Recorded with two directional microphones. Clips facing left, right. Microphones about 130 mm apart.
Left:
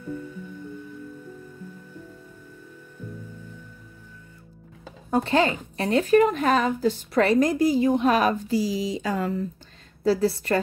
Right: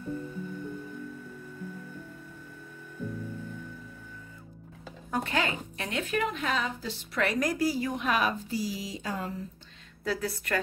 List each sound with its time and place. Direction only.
5.1 s speech: 30° left (ahead or behind)
8.0 s speech: 40° left (ahead or behind)
8.5 s speech: 90° left
10.0 s speech: 30° left (ahead or behind)